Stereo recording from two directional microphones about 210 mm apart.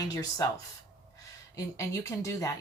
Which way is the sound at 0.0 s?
15° left (ahead or behind).